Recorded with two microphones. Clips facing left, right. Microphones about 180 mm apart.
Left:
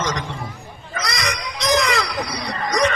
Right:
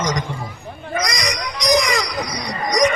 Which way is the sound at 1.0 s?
15° right (ahead or behind).